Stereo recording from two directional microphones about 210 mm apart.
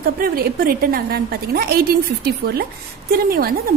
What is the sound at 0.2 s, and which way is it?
A woman's voice, 45° right (ahead or behind).